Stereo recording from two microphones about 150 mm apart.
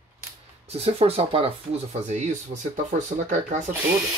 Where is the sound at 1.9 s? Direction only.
50° right (ahead or behind).